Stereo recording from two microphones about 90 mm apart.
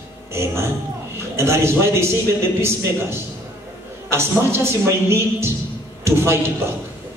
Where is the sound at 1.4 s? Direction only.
30° right (ahead or behind).